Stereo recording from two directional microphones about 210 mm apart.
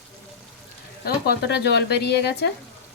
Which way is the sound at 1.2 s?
50° left (ahead or behind).